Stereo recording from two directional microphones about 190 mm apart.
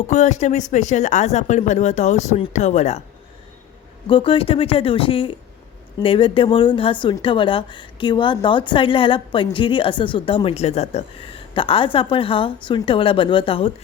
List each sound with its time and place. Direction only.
0.1 s speech: 40° left (ahead or behind)
4.0 s a woman's voice: 30° left (ahead or behind)